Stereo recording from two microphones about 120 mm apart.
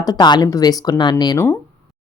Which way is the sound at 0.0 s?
35° left (ahead or behind).